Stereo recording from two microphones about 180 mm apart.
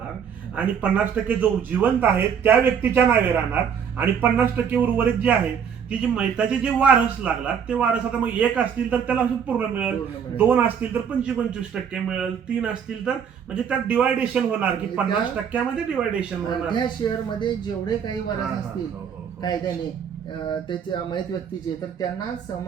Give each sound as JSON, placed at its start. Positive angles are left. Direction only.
{"t": 0.5, "sound": "speech", "side_deg": -10}
{"t": 16.6, "sound": "speech", "side_deg": 25}
{"t": 19.4, "sound": "speech", "side_deg": 25}